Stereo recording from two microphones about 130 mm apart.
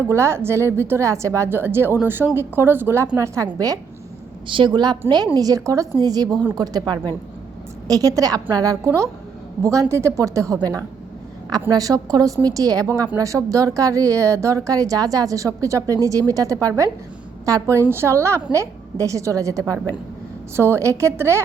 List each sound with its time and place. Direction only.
0.1 s a woman's voice: 20° right (ahead or behind)
4.4 s a woman's voice: 40° right (ahead or behind)
9.9 s a woman's voice: 20° right (ahead or behind)